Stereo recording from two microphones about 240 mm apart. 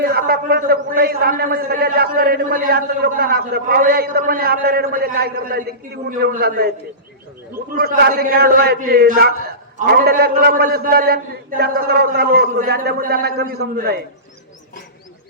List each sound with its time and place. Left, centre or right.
0.0 s a man's voice: right